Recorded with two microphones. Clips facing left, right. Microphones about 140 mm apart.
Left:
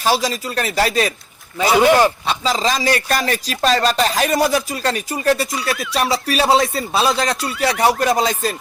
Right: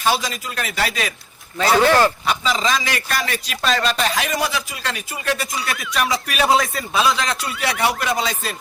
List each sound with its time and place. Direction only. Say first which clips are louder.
0.0 s speech: left 3 dB; 40° left (ahead or behind)
1.5 s speech: left 2 dB; 10° left (ahead or behind)
2.2 s speech: left 2 dB; 35° left (ahead or behind)
7.1 s speech: left 3 dB; 45° left (ahead or behind)